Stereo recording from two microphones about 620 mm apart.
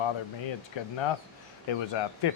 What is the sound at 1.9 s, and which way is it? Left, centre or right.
Speech, left.